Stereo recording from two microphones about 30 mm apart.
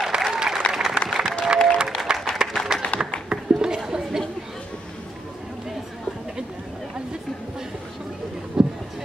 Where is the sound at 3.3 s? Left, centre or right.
Right.